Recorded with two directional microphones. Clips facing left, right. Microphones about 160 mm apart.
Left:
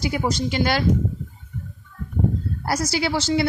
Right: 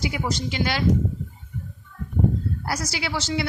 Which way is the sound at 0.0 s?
40° left (ahead or behind).